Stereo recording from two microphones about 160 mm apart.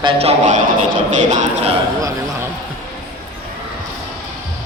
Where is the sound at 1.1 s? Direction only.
45° right (ahead or behind).